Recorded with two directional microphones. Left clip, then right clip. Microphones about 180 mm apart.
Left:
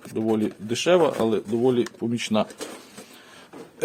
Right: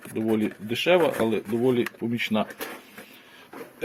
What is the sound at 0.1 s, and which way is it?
Speech, 15° left (ahead or behind).